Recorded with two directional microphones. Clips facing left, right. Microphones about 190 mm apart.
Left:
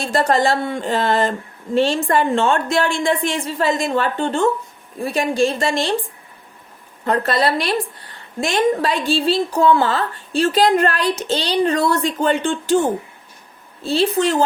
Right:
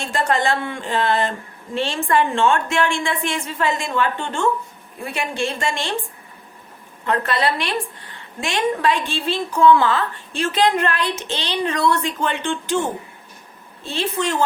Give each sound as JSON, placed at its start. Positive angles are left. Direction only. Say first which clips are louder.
{"t": 0.0, "sound": "a woman's voice", "louder": "left 4 dB", "side_deg": 35}
{"t": 7.0, "sound": "a woman's voice", "louder": "left 3 dB", "side_deg": 40}
{"t": 13.8, "sound": "a woman's voice", "louder": "left 6 dB", "side_deg": 35}